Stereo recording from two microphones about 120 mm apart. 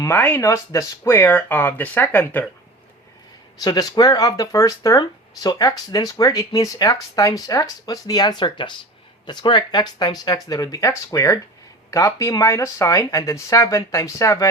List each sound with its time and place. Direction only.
0.0 s speech: 20° left (ahead or behind)
0.4 s speech: 25° left (ahead or behind)
1.3 s speech: 15° left (ahead or behind)
3.6 s speech: 35° left (ahead or behind)